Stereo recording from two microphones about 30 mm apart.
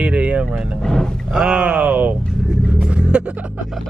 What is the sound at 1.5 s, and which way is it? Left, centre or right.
Speech, right.